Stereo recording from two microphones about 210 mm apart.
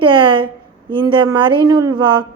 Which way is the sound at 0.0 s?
25° right (ahead or behind).